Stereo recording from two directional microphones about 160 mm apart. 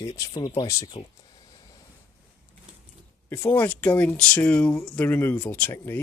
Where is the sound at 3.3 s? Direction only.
10° left (ahead or behind).